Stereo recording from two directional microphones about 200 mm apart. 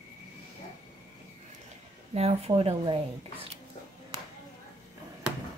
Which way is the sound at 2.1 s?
30° right (ahead or behind).